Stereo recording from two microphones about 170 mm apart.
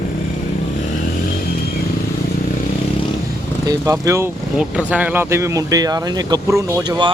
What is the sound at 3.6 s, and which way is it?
Speech, 20° right (ahead or behind).